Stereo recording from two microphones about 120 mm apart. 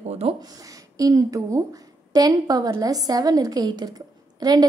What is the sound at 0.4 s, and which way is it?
A woman's voice, 30° right (ahead or behind).